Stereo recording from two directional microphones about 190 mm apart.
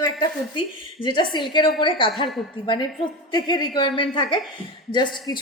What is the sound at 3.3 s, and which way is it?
A woman's voice, 20° left (ahead or behind).